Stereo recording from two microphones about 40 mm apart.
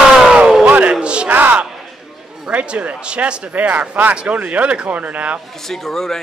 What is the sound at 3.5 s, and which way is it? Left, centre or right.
Speech, right.